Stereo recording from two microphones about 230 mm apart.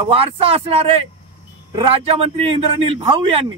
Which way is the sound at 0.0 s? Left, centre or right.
Right.